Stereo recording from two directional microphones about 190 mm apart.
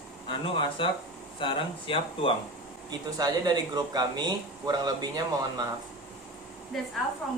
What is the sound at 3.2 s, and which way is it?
Speech, 20° right (ahead or behind).